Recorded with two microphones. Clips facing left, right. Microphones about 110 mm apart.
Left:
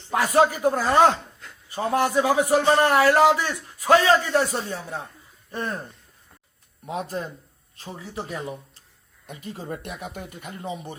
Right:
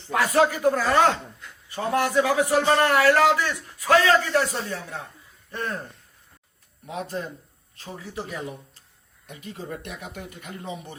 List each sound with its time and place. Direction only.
0.1 s speech: 25° left (ahead or behind)
8.1 s speech: 30° left (ahead or behind)